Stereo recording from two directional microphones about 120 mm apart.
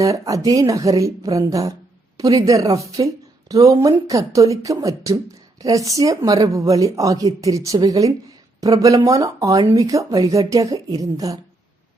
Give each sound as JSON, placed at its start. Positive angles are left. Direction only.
{"t": 0.0, "sound": "speech", "side_deg": -25}